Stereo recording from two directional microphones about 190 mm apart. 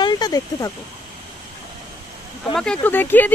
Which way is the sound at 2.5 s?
5° left (ahead or behind).